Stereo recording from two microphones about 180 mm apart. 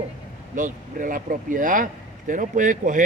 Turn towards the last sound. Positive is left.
turn(degrees=-45)  # may be behind; listen again after turning